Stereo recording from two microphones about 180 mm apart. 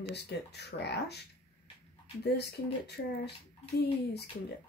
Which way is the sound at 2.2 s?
65° left (ahead or behind).